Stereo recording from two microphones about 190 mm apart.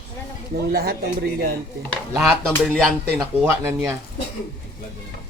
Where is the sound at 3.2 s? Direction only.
10° right (ahead or behind).